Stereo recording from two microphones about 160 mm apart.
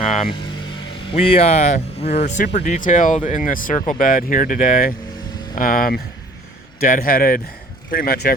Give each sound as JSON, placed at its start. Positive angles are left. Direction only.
{"t": 1.1, "sound": "speech", "side_deg": 40}